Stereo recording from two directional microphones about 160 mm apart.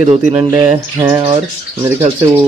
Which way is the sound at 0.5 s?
20° right (ahead or behind).